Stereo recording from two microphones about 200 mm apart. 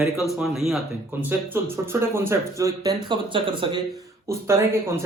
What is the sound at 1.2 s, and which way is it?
Speech, 10° right (ahead or behind).